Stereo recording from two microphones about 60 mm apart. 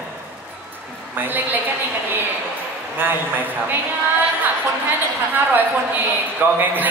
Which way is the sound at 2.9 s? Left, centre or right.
Right.